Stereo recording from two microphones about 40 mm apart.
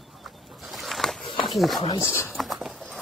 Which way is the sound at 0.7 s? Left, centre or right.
Centre.